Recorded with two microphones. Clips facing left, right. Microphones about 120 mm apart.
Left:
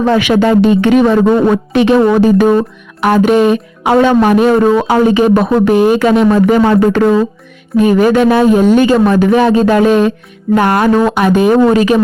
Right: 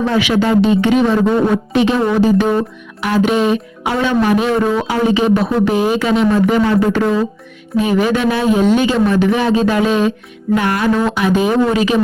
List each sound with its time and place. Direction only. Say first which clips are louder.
0.0 s speech: left 5 dB; 55° left (ahead or behind)
7.8 s speech: left 6 dB; 50° left (ahead or behind)